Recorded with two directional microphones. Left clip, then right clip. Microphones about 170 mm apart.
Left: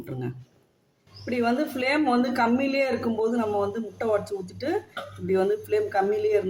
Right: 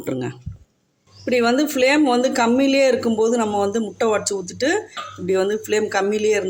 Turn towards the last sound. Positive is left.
turn(degrees=-55)  # may be behind; listen again after turning